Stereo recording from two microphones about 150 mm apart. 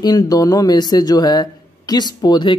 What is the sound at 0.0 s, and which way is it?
Speech, 25° left (ahead or behind).